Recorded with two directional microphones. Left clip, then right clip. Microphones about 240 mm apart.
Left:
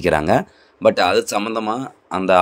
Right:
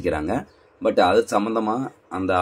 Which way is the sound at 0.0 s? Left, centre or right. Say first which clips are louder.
Left 8 dB; left.